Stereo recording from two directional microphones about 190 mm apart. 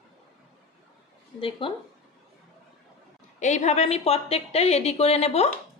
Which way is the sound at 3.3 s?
40° left (ahead or behind).